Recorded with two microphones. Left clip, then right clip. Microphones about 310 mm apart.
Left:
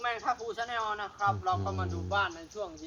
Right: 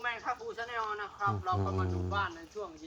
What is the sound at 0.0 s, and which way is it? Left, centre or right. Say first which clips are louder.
Speech: left 4 dB; centre.